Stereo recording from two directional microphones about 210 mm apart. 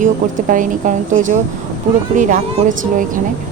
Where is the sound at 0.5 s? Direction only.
40° right (ahead or behind).